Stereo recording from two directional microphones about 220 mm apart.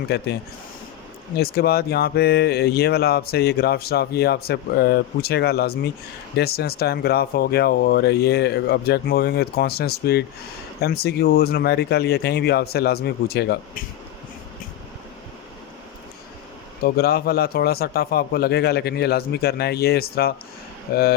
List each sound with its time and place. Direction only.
0.1 s speech: 50° left (ahead or behind)
1.4 s speech: 45° left (ahead or behind)
16.8 s speech: 45° left (ahead or behind)